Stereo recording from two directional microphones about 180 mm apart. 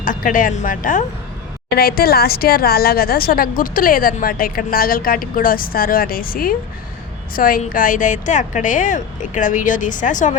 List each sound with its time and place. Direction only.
0.0 s a woman's voice: 45° left (ahead or behind)